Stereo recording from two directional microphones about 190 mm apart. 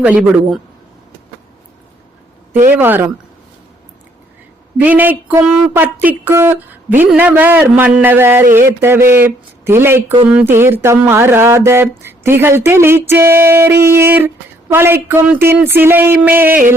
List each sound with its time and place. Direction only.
0.0 s a man's voice: 5° right (ahead or behind)
2.7 s speech: 10° right (ahead or behind)
4.8 s a woman's voice: 10° right (ahead or behind)